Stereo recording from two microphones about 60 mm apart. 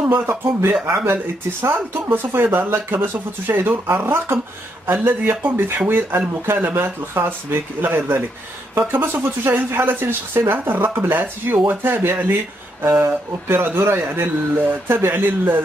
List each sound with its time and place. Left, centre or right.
0.1 s speech: right